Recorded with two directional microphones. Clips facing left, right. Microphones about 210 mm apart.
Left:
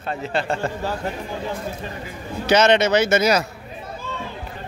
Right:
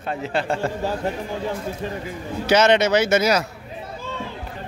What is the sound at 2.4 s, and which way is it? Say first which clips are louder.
Speech: even; 10° right (ahead or behind).